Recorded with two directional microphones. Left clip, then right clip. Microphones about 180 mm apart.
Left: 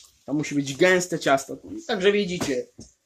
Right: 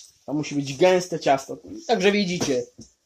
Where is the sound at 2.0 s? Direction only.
30° right (ahead or behind).